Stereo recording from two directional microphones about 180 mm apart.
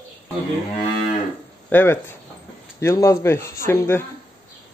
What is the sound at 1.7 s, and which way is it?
Speech, 10° left (ahead or behind).